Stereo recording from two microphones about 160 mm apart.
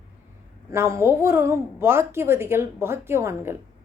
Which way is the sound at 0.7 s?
15° right (ahead or behind).